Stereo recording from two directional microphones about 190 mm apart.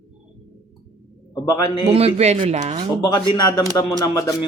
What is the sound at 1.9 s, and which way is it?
Speech, 35° right (ahead or behind).